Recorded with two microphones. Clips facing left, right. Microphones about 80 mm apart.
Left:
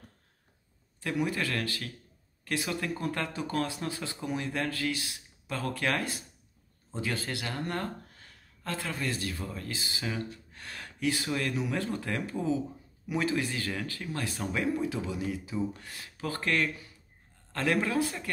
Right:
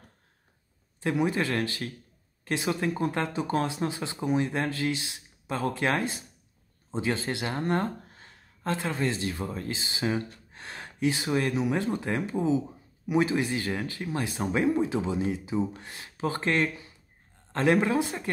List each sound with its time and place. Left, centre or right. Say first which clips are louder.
1.0 s speech: right 4 dB; right